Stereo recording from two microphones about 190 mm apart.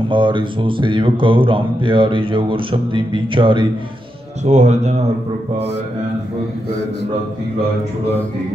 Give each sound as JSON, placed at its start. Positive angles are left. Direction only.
{"t": 0.1, "sound": "speech", "side_deg": -25}
{"t": 4.5, "sound": "speech", "side_deg": -40}